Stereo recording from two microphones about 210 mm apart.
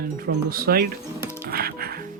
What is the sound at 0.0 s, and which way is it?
Speech, 45° right (ahead or behind).